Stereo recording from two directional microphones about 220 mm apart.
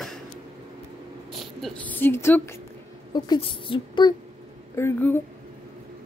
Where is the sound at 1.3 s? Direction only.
Centre (ahead or behind); by 4.1 s 20° left (ahead or behind).